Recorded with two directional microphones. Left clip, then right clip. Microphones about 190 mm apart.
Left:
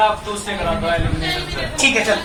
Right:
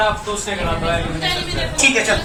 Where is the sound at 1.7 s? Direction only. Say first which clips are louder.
Right 1 dB; 10° left (ahead or behind).